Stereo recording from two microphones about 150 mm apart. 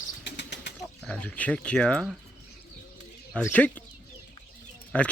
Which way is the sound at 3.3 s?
10° left (ahead or behind).